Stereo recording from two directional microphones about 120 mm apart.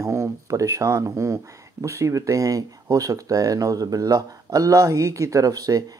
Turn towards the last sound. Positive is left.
turn(degrees=-30)  # may be behind; listen again after turning